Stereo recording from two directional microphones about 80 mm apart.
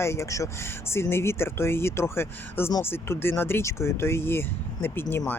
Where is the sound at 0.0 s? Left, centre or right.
Left.